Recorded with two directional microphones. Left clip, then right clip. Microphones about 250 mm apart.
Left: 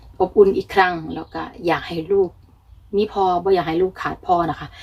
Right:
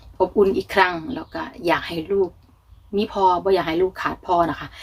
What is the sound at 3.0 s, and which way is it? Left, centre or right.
Speech, centre.